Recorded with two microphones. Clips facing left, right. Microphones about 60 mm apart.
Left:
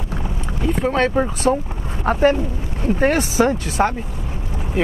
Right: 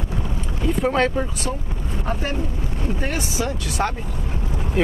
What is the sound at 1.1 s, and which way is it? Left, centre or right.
Speech, left.